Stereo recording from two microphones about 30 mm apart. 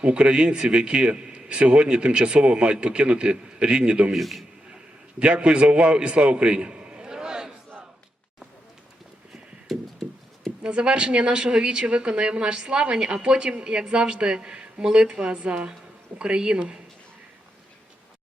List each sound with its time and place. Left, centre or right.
0.0 s a man's voice: right
4.1 s a man's voice: centre
5.2 s a man's voice: right
9.7 s a sound: centre
10.6 s a man's voice: right